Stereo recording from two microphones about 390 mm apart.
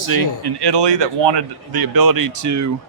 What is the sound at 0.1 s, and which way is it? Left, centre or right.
Speech, right.